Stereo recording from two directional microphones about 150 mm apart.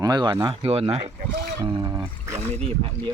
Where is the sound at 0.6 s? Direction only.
40° right (ahead or behind).